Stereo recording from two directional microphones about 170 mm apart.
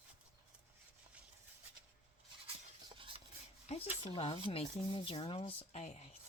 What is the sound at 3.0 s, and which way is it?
Rub, 30° right (ahead or behind).